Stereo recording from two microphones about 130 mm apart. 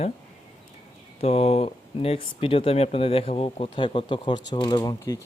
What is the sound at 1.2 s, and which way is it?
Speech, 50° left (ahead or behind).